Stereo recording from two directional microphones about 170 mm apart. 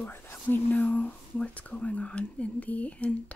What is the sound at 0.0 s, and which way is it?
Speech, 10° left (ahead or behind).